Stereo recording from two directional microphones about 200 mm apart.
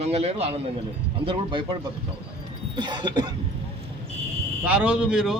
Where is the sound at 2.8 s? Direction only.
25° right (ahead or behind).